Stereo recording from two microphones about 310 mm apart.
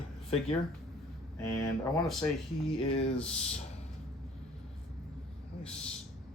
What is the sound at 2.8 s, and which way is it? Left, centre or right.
Speech, centre.